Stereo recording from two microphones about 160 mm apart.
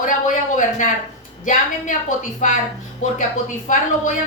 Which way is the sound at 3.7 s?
50° left (ahead or behind).